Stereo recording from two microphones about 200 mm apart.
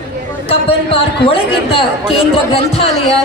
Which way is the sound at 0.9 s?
25° left (ahead or behind).